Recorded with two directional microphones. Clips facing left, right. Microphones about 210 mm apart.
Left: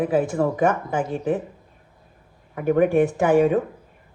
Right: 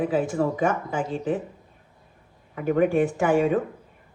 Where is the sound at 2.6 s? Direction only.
50° left (ahead or behind).